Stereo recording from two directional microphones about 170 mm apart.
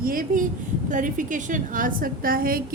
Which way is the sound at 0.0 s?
55° right (ahead or behind).